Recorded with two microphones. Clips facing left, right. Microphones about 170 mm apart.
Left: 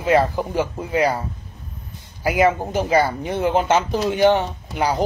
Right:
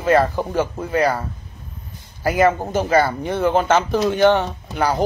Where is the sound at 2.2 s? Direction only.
15° left (ahead or behind).